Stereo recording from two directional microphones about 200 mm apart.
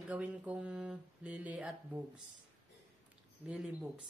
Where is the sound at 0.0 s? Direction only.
5° right (ahead or behind).